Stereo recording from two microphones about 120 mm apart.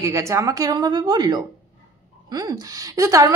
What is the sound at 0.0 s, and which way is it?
A woman's voice, 25° right (ahead or behind).